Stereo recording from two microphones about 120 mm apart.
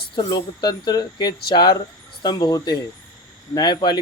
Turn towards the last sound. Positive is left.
turn(degrees=40)  # may be behind; listen again after turning